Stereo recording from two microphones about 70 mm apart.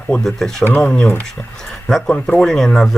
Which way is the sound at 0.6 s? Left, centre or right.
Left.